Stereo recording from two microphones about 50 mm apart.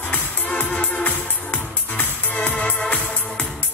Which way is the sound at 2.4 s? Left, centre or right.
Left.